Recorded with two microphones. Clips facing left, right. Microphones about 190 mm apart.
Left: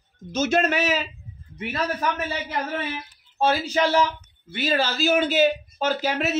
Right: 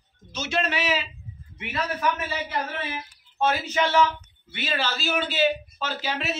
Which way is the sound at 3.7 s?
35° left (ahead or behind).